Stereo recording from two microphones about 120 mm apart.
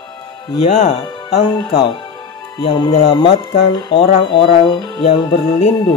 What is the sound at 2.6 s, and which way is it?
Speech, 40° left (ahead or behind).